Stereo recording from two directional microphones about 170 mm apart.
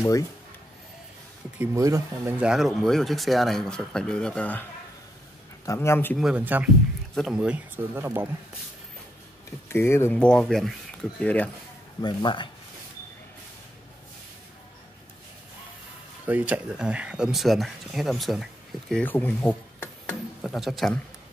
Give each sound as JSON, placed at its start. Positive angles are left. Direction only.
{"t": 1.6, "sound": "speech", "side_deg": -20}
{"t": 2.4, "sound": "speech", "side_deg": 0}
{"t": 5.7, "sound": "speech", "side_deg": 15}
{"t": 6.1, "sound": "speech", "side_deg": -5}
{"t": 9.7, "sound": "speech", "side_deg": 15}
{"t": 12.0, "sound": "speech", "side_deg": 25}
{"t": 16.3, "sound": "speech", "side_deg": -10}
{"t": 20.4, "sound": "speech", "side_deg": 0}